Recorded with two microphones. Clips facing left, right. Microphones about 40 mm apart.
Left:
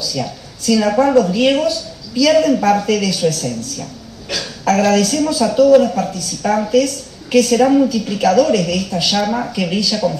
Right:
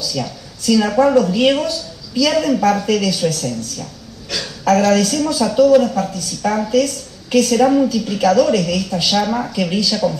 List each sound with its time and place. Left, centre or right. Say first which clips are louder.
0.1 s speech: left 1 dB; centre
4.4 s speech: right 1 dB; centre